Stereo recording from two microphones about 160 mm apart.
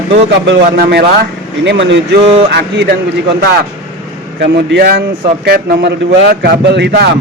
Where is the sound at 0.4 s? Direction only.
90° right.